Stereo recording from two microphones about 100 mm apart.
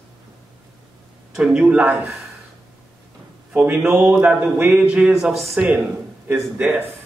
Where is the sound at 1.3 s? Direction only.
10° right (ahead or behind).